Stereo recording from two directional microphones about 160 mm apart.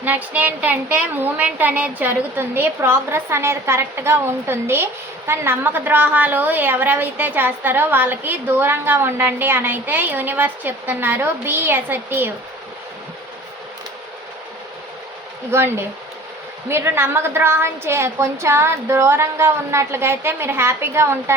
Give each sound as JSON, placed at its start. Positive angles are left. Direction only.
{"t": 0.0, "sound": "a woman's voice", "side_deg": -10}
{"t": 15.5, "sound": "a woman's voice", "side_deg": -15}